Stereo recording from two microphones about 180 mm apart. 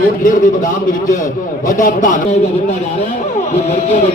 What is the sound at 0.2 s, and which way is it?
A man's voice, 45° left (ahead or behind).